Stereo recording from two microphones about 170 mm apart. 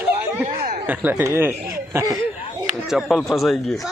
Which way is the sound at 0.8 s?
10° right (ahead or behind).